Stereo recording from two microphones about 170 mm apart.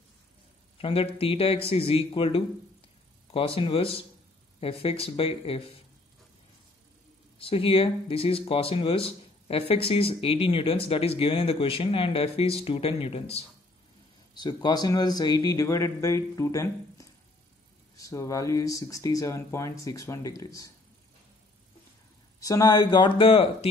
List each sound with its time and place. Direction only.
0.7 s speech: 35° left (ahead or behind)
7.3 s speech: 35° left (ahead or behind)
14.3 s speech: 25° left (ahead or behind)
22.4 s speech: 20° left (ahead or behind)